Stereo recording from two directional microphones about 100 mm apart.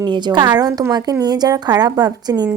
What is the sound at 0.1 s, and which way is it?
A woman's voice, 50° right (ahead or behind).